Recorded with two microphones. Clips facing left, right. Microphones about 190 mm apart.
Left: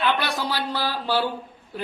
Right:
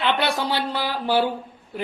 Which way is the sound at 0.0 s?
25° right (ahead or behind).